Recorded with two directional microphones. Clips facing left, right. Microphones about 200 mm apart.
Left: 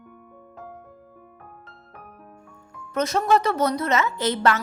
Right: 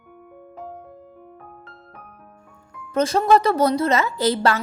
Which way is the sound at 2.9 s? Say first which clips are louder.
Right 4 dB; 30° right (ahead or behind).